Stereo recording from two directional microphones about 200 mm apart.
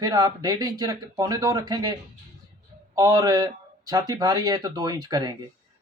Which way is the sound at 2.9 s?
20° right (ahead or behind).